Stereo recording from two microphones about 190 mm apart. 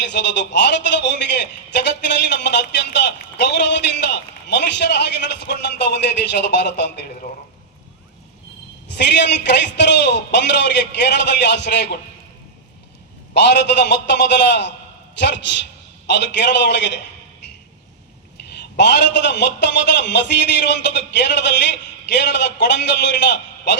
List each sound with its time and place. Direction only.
0.0 s a man's voice: 65° left (ahead or behind)
8.9 s a man's voice: 65° left (ahead or behind)
13.3 s a man's voice: 65° left (ahead or behind)
16.0 s a man's voice: 65° left (ahead or behind)
18.8 s a man's voice: 65° left (ahead or behind)